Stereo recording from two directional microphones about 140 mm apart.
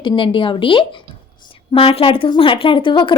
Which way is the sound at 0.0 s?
35° left (ahead or behind).